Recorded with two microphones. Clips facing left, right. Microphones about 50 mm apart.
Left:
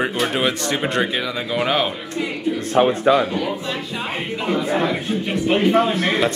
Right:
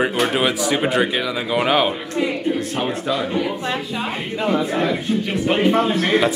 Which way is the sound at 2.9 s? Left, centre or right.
Left.